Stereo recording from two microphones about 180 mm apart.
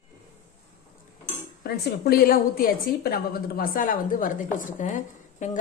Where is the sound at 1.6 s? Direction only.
60° left (ahead or behind).